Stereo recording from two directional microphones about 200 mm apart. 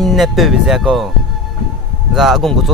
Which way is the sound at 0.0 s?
Centre (ahead or behind).